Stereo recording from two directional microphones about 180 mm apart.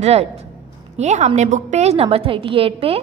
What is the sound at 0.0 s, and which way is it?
A woman's voice, 35° right (ahead or behind).